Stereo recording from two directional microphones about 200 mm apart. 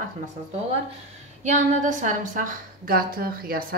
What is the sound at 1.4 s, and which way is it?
A woman's voice, 40° right (ahead or behind).